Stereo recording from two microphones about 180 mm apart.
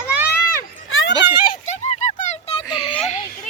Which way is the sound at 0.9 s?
90° left.